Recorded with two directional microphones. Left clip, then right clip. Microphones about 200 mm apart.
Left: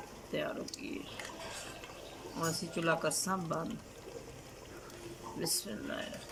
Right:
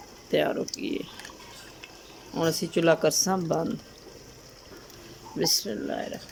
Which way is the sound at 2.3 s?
35° right (ahead or behind).